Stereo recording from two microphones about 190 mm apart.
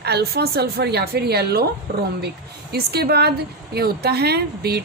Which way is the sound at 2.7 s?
55° right (ahead or behind).